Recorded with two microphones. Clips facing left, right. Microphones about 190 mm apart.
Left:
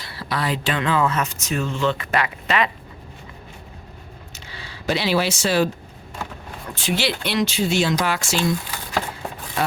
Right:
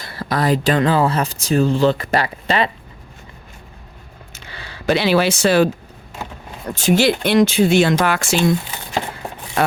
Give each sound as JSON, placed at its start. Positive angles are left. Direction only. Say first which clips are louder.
{"t": 0.0, "sound": "speech", "louder": "right 6 dB", "side_deg": -45}
{"t": 4.4, "sound": "speech", "louder": "right 6 dB", "side_deg": -60}
{"t": 6.7, "sound": "speech", "louder": "right 8 dB", "side_deg": -45}